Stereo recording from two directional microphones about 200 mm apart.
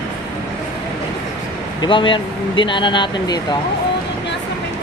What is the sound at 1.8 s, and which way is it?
Speech, 25° left (ahead or behind).